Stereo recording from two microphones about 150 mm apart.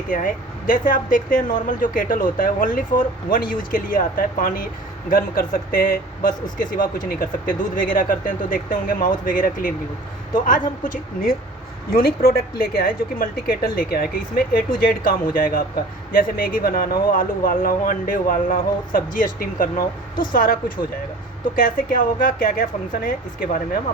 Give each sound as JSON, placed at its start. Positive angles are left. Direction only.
{"t": 0.1, "sound": "speech", "side_deg": 65}
{"t": 11.9, "sound": "speech", "side_deg": 90}